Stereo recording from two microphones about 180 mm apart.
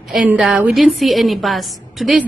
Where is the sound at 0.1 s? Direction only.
5° right (ahead or behind).